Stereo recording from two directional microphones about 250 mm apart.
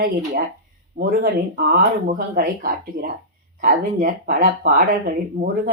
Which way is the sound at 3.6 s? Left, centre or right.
Right.